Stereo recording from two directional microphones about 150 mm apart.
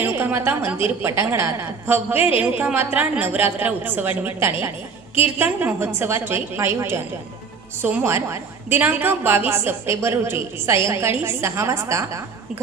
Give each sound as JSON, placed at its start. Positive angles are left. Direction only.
{"t": 0.0, "sound": "a woman's voice", "side_deg": -15}